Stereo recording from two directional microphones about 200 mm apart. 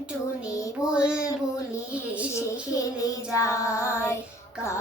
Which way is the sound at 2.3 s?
15° left (ahead or behind).